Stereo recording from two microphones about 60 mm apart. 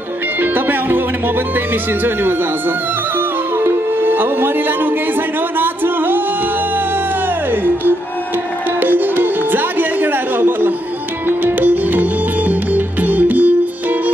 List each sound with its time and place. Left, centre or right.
0.4 s music: right
3.5 s music: right
8.7 s music: right